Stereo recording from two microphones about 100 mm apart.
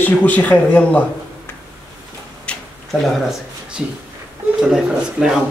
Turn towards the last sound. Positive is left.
turn(degrees=-5)  # may be behind; listen again after turning